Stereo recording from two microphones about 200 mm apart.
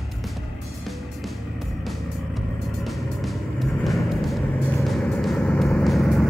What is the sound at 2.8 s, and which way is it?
Vehicle, centre (ahead or behind).